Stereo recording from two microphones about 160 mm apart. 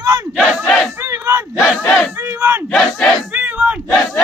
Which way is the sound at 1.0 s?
15° right (ahead or behind).